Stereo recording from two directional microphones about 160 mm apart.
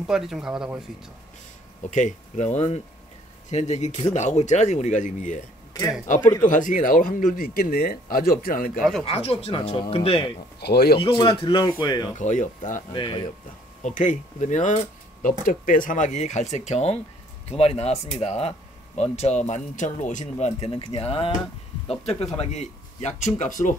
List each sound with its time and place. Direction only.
0.0 s speech: 5° right (ahead or behind)
1.9 s speech: 50° left (ahead or behind)
9.0 s speech: 40° left (ahead or behind)
10.6 s speech: 90° left
11.0 s speech: 30° left (ahead or behind)
12.2 s speech: 50° left (ahead or behind)
12.9 s speech: 30° left (ahead or behind)
13.8 s speech: 50° left (ahead or behind)